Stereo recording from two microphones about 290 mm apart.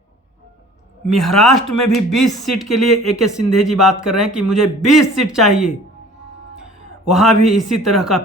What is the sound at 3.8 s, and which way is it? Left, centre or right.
Speech, centre.